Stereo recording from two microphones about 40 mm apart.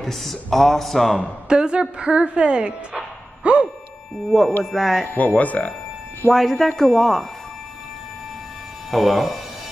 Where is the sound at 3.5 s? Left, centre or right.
Right.